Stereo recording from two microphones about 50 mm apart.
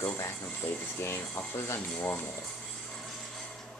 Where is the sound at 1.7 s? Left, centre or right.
Left.